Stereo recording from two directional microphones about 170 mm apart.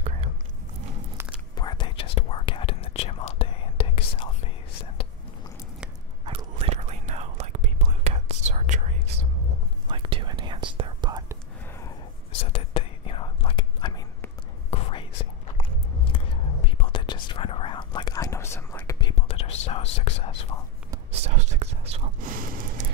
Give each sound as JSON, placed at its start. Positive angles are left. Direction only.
{"t": 1.1, "sound": "biting", "side_deg": -5}
{"t": 1.5, "sound": "whispering", "side_deg": 25}
{"t": 6.2, "sound": "whispering", "side_deg": -35}
{"t": 9.8, "sound": "whispering", "side_deg": -30}
{"t": 12.5, "sound": "whispering", "side_deg": 35}
{"t": 16.6, "sound": "whispering", "side_deg": 35}
{"t": 19.1, "sound": "whispering", "side_deg": 35}
{"t": 21.1, "sound": "whispering", "side_deg": -40}
{"t": 22.2, "sound": "a sound", "side_deg": -55}